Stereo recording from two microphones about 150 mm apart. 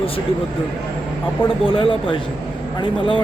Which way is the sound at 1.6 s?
35° left (ahead or behind).